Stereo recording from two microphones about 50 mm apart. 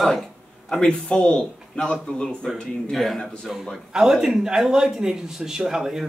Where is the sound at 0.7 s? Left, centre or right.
Centre.